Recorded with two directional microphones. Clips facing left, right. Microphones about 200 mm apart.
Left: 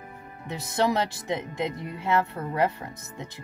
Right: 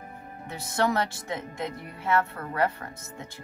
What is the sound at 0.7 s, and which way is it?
Speech, 20° left (ahead or behind).